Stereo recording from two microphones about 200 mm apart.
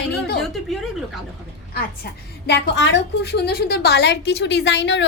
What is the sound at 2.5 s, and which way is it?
A woman's voice, 60° left (ahead or behind).